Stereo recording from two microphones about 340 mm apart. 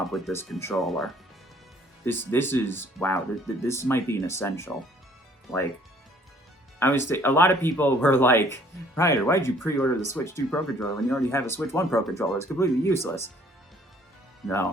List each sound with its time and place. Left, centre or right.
0.0 s speech: centre
6.7 s speech: centre
14.4 s speech: centre